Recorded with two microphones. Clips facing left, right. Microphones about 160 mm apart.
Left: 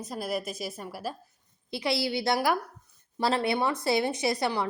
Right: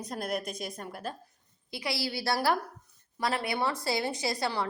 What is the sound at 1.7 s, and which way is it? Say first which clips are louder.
Speech: left 5 dB; 25° left (ahead or behind).